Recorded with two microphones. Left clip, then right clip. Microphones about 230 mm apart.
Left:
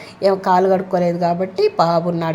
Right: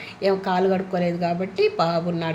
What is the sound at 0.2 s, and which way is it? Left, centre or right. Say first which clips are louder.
A woman's voice: left 7 dB; left.